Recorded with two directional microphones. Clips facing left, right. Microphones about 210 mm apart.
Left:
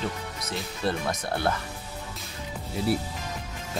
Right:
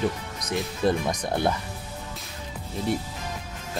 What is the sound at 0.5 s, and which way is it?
Speech, 15° right (ahead or behind).